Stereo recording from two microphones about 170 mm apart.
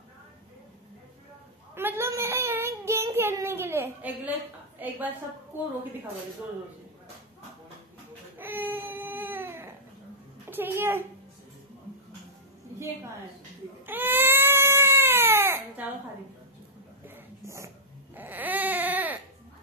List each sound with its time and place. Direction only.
1.8 s child singing: 15° right (ahead or behind)
4.7 s a woman's voice: 10° right (ahead or behind)
8.4 s baby cry: 10° right (ahead or behind)
10.5 s a child's voice: 10° right (ahead or behind)
13.8 s cat: 10° right (ahead or behind)
17.0 s a sound: 15° right (ahead or behind)
18.1 s baby cry: 10° right (ahead or behind)